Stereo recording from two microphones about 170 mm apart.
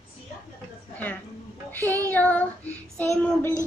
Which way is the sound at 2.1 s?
10° left (ahead or behind).